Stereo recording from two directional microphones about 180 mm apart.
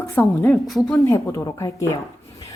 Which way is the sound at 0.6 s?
Centre (ahead or behind).